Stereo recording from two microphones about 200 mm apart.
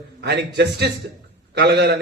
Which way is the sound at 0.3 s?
55° right (ahead or behind).